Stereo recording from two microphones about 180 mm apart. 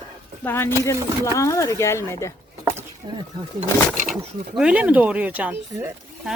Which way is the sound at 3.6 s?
45° right (ahead or behind).